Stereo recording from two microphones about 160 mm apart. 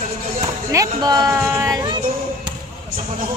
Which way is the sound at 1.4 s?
15° right (ahead or behind).